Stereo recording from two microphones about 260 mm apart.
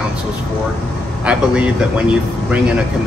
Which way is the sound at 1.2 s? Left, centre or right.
Centre.